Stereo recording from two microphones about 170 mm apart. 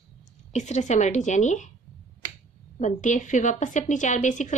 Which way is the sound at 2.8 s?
45° left (ahead or behind).